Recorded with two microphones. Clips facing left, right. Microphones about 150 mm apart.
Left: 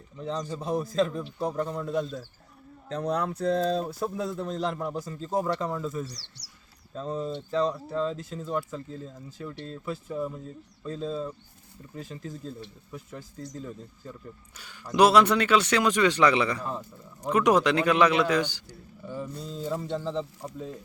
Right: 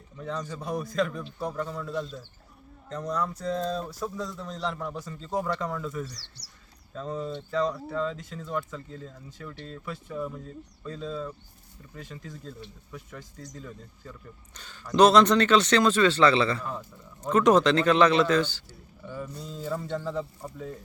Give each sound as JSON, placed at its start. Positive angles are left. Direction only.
{"t": 0.2, "sound": "speech", "side_deg": 30}
{"t": 1.9, "sound": "a man's voice", "side_deg": 55}
{"t": 2.9, "sound": "a man's voice", "side_deg": 65}
{"t": 4.9, "sound": "speech", "side_deg": 35}
{"t": 14.5, "sound": "speech", "side_deg": 10}